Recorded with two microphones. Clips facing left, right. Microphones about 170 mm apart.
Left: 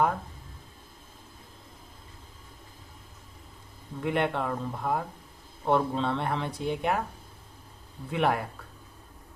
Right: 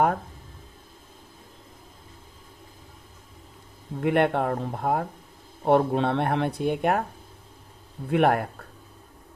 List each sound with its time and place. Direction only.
4.0 s speech: 55° right (ahead or behind)
8.1 s speech: 55° right (ahead or behind)